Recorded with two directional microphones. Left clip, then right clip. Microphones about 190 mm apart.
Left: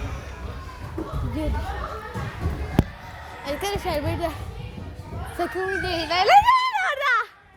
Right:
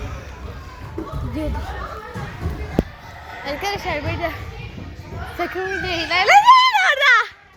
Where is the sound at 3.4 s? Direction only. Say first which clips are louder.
Right 3 dB; 30° left (ahead or behind).